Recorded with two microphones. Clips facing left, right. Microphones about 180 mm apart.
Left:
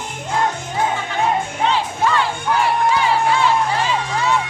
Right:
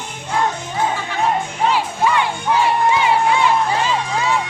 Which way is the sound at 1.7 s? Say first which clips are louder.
Right 1 dB; 15° right (ahead or behind).